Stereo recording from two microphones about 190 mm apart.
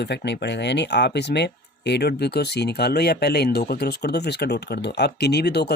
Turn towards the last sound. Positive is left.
turn(degrees=60)  # may be behind; listen again after turning